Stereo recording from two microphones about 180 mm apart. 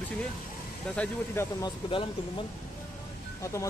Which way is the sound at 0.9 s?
10° left (ahead or behind).